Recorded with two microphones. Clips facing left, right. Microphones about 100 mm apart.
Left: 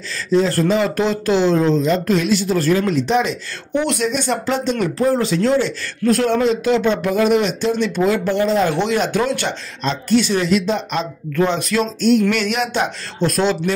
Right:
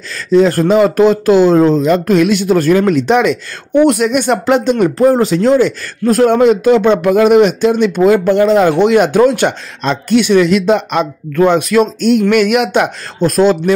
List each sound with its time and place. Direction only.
0.3 s speech: 55° right (ahead or behind); by 3.8 s 70° right (ahead or behind)
3.8 s speech: 55° right (ahead or behind); by 11.1 s 70° right (ahead or behind)
11.3 s speech: 55° right (ahead or behind)
13.2 s speech: 45° right (ahead or behind)